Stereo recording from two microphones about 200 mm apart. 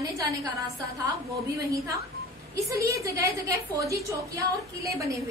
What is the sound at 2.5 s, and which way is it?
A woman's voice, 15° right (ahead or behind).